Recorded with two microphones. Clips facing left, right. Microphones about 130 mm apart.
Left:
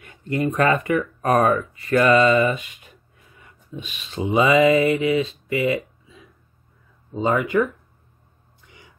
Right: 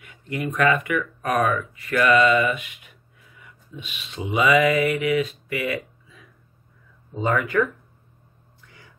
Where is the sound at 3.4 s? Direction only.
40° left (ahead or behind); by 6.3 s 25° left (ahead or behind).